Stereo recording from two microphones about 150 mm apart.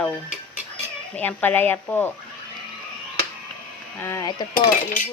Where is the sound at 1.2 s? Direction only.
10° left (ahead or behind).